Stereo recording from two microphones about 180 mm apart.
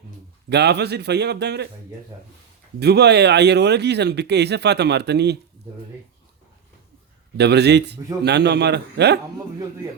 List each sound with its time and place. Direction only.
0.5 s speech: 70° right (ahead or behind)
2.7 s speech: 65° right (ahead or behind)
7.3 s speech: 70° right (ahead or behind)